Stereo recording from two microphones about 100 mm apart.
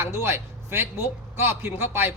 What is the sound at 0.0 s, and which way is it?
A woman's voice, 25° right (ahead or behind).